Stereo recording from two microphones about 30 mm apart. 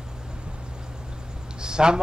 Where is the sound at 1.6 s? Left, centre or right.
Right.